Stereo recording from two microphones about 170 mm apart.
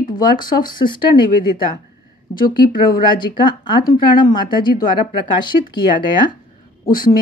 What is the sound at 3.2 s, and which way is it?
Speech, 25° left (ahead or behind).